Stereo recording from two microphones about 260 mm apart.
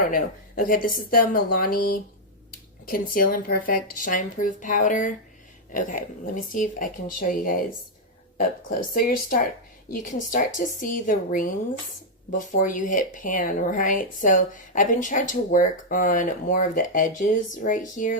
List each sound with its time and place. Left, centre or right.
0.1 s speech: left
8.9 s speech: left